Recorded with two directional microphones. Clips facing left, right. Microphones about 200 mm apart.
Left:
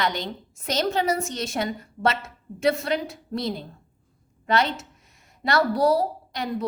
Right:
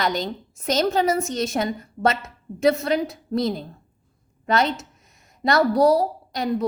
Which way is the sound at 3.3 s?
45° right (ahead or behind).